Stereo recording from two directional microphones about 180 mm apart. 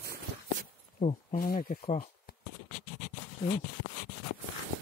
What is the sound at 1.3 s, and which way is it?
Speech, 55° left (ahead or behind).